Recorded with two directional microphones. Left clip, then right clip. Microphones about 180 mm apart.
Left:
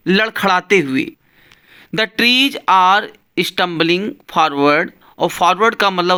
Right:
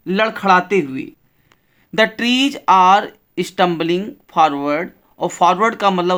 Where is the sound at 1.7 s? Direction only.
20° left (ahead or behind).